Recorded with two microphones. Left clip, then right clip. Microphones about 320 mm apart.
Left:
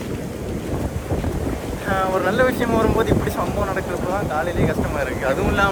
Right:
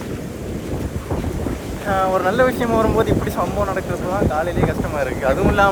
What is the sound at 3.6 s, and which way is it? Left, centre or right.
Speech, right.